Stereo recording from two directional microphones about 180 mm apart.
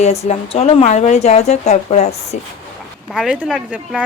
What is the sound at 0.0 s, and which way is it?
Speech, 35° left (ahead or behind).